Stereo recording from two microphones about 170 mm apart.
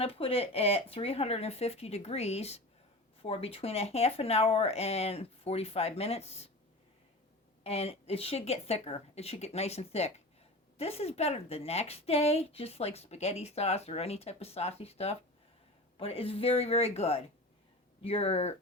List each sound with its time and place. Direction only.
0.0 s a woman's voice: 35° left (ahead or behind)
7.6 s a woman's voice: 35° left (ahead or behind)